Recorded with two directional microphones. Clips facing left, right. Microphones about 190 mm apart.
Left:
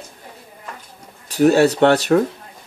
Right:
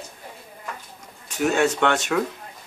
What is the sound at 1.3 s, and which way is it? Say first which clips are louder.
Speech: left 8 dB; 35° left (ahead or behind).